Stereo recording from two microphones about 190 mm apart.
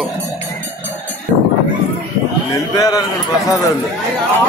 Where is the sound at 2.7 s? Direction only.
20° left (ahead or behind).